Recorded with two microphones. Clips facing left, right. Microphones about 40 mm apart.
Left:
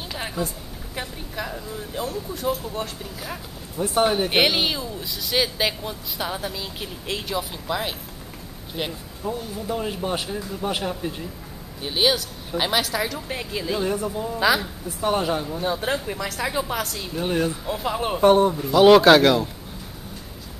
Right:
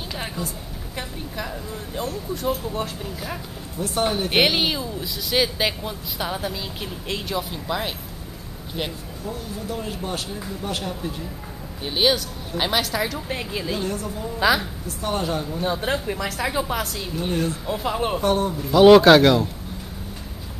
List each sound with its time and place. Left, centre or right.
0.9 s speech: centre
3.7 s speech: centre
4.3 s speech: centre
9.2 s speech: centre
11.8 s speech: centre
13.8 s speech: centre
14.4 s speech: centre
15.0 s speech: centre
17.1 s speech: centre
17.6 s speech: centre
18.2 s speech: left
18.5 s speech: centre